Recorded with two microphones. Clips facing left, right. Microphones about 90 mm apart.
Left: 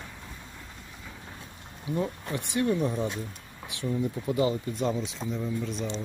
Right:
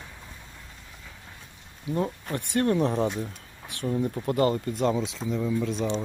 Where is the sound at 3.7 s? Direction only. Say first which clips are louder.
Right 2 dB; 50° right (ahead or behind); by 5.5 s 90° right.